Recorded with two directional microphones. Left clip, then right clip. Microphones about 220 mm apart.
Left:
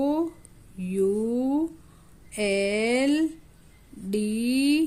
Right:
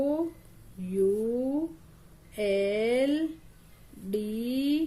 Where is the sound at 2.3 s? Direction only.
40° left (ahead or behind).